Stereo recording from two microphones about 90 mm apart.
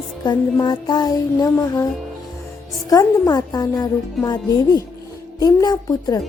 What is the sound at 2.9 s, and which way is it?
Speech, 40° left (ahead or behind).